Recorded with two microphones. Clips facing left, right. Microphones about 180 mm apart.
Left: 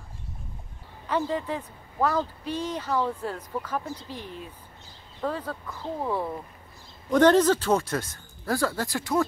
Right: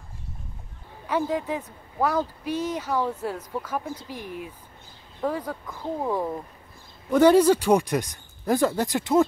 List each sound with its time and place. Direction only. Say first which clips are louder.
1.0 s speech: right 2 dB; 10° right (ahead or behind)